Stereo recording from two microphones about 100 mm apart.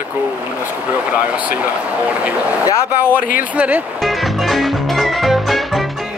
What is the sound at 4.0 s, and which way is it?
Music, centre (ahead or behind).